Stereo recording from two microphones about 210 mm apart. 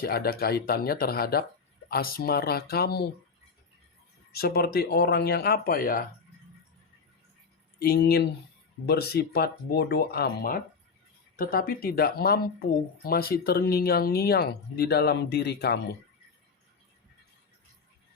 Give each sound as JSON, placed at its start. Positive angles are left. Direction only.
{"t": 0.0, "sound": "speech", "side_deg": 45}
{"t": 4.3, "sound": "speech", "side_deg": 50}
{"t": 7.8, "sound": "speech", "side_deg": 50}